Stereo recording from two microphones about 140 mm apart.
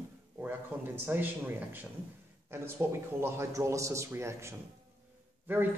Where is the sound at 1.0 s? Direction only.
15° right (ahead or behind).